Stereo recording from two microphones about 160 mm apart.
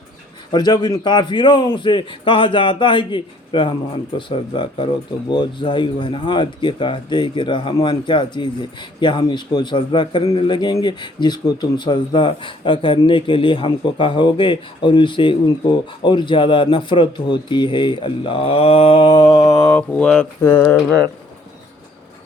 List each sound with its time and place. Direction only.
0.5 s a man's voice: 25° left (ahead or behind)